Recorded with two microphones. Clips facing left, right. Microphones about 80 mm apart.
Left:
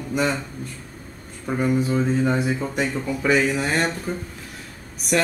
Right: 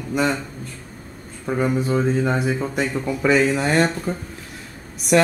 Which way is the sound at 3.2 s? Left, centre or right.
Right.